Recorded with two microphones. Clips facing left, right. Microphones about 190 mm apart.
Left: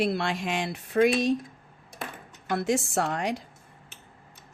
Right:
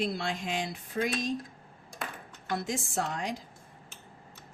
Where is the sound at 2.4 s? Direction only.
65° left (ahead or behind).